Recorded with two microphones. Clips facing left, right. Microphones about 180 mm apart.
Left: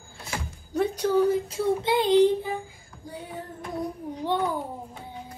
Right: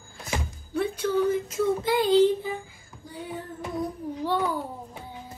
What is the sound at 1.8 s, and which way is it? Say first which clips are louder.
Child singing: left 1 dB; 25° left (ahead or behind).